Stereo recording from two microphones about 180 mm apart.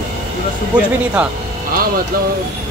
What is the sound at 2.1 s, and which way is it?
Speech, 55° right (ahead or behind).